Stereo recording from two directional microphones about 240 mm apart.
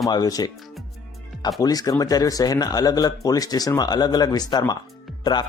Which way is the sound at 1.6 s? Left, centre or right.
Centre.